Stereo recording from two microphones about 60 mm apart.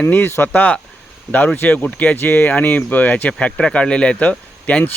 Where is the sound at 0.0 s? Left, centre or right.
Left.